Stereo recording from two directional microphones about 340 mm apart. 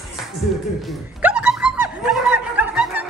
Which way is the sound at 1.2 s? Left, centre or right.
Centre.